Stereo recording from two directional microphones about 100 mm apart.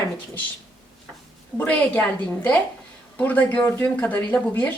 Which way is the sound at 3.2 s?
15° left (ahead or behind).